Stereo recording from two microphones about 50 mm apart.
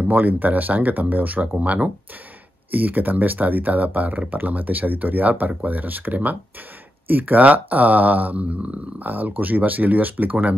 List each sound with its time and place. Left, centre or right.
0.1 s speech: right